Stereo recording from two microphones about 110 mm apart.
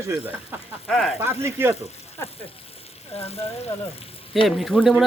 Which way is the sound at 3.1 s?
65° left (ahead or behind).